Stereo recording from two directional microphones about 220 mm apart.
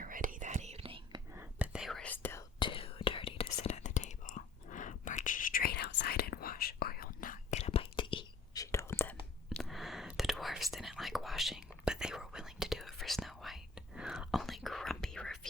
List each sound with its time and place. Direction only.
0.0 s whispering: 40° right (ahead or behind)
1.4 s whispering: 5° right (ahead or behind)
2.6 s whispering: 25° left (ahead or behind); by 15.4 s centre (ahead or behind)